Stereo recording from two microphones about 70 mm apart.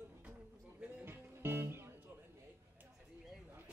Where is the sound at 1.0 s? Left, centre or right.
Right.